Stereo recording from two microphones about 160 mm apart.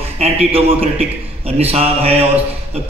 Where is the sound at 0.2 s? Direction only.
40° right (ahead or behind).